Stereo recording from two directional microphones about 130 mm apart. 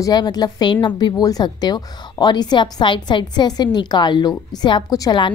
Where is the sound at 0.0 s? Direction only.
30° left (ahead or behind).